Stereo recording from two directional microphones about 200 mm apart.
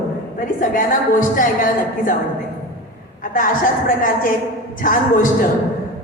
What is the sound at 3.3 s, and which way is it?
A woman's voice, 45° left (ahead or behind).